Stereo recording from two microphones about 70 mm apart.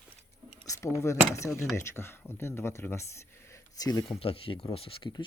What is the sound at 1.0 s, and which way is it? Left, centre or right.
Speech, left.